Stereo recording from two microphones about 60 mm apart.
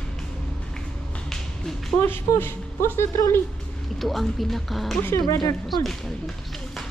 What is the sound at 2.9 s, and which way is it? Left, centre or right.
Speech, left.